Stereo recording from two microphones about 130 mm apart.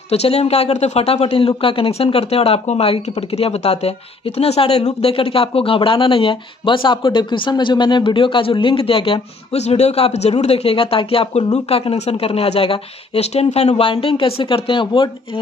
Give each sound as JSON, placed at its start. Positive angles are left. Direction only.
{"t": 0.1, "sound": "speech", "side_deg": 50}